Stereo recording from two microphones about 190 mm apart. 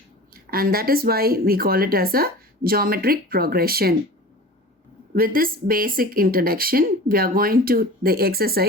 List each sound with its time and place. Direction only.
0.5 s speech: 50° right (ahead or behind)
5.1 s speech: 50° right (ahead or behind)